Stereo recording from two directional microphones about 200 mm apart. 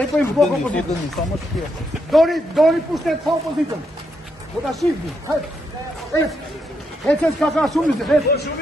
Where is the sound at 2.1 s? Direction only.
Centre (ahead or behind).